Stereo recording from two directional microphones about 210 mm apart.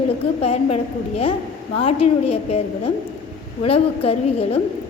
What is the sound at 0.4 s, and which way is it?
A woman's voice, 30° left (ahead or behind).